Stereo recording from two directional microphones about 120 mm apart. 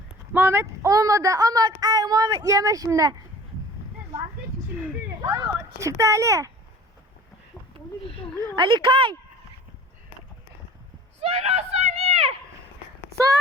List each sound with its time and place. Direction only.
0.3 s speech: 20° right (ahead or behind)
5.2 s speech: 25° right (ahead or behind)
8.5 s a woman's voice: 40° right (ahead or behind)
11.2 s a sound: 60° right (ahead or behind)